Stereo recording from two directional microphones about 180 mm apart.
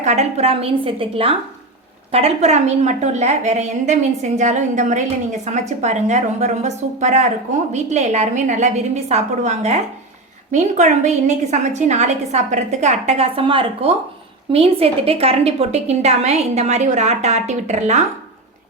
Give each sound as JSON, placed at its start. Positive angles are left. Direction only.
{"t": 0.0, "sound": "a woman's voice", "side_deg": -40}